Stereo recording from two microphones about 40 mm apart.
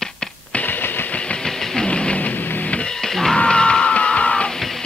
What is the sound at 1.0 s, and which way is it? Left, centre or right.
Train, left.